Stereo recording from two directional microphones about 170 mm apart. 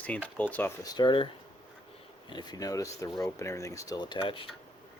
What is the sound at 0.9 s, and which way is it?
Speech, 25° left (ahead or behind).